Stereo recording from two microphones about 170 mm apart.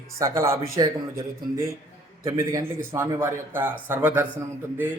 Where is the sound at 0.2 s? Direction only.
15° right (ahead or behind).